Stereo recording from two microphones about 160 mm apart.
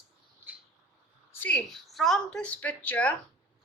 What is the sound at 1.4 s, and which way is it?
A woman's voice, 5° left (ahead or behind).